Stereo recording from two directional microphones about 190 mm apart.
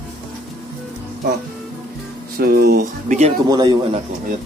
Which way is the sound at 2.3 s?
55° right (ahead or behind).